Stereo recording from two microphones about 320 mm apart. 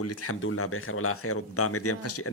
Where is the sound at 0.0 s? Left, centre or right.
Left.